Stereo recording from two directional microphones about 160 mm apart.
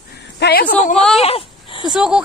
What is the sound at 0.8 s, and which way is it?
Speech, 50° left (ahead or behind).